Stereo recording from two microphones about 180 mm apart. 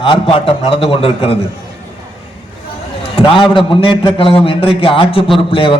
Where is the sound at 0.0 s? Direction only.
30° left (ahead or behind).